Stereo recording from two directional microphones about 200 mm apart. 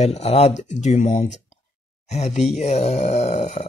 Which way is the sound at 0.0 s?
30° left (ahead or behind).